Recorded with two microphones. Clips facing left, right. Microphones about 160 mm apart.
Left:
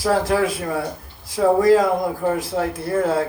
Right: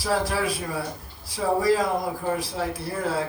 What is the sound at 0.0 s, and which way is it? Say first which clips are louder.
Speech: left 6 dB; 50° left (ahead or behind).